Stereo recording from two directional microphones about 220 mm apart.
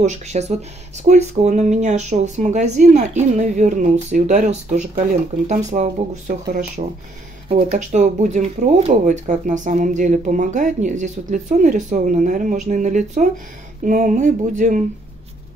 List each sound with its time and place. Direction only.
0.0 s speech: 30° right (ahead or behind)